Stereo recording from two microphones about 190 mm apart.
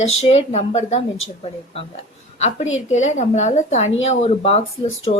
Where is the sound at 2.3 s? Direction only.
35° left (ahead or behind).